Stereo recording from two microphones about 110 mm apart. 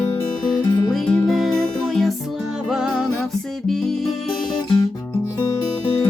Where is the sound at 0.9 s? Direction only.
Centre (ahead or behind).